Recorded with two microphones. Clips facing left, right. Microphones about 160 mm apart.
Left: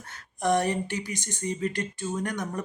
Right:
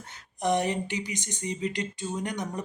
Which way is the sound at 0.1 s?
20° right (ahead or behind).